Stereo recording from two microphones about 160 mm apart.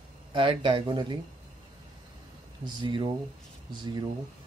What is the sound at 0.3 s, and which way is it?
Speech, 30° right (ahead or behind).